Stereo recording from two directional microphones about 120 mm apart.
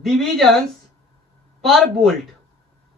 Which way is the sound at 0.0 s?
Centre (ahead or behind).